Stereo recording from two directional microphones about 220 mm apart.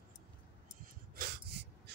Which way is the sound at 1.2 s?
45° right (ahead or behind).